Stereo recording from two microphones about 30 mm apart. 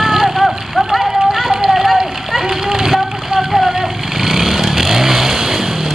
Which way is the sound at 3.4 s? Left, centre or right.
Centre.